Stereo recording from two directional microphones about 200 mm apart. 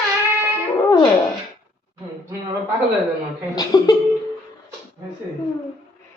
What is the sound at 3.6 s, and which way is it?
Speech, 20° left (ahead or behind).